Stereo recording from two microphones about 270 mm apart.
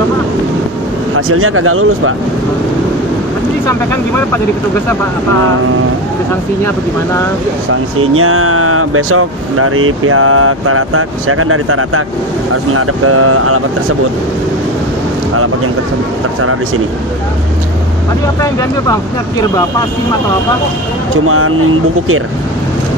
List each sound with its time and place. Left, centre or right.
1.1 s speech: right
8.1 s speech: right
18.4 s speech: centre
21.3 s speech: right